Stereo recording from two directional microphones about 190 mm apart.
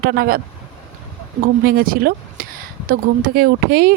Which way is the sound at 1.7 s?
50° right (ahead or behind).